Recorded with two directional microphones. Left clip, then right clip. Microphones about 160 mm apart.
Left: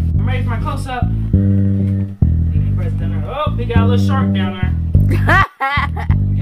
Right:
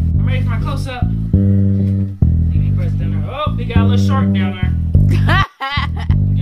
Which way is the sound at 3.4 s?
35° right (ahead or behind).